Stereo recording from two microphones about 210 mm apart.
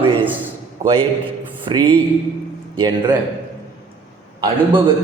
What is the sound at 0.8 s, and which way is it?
Speech, 20° right (ahead or behind).